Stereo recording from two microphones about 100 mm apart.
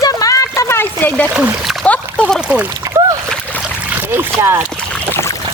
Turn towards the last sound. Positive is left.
turn(degrees=25)  # may be behind; listen again after turning